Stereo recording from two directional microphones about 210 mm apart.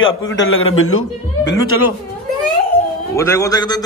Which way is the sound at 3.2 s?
15° left (ahead or behind).